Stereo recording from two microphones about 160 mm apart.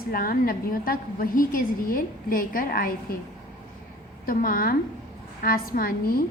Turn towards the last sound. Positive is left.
turn(degrees=65)  # may be behind; listen again after turning